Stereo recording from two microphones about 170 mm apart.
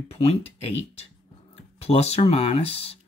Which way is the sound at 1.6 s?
35° left (ahead or behind).